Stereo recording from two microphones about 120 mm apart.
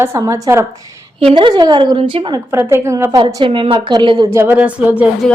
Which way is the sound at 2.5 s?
20° right (ahead or behind).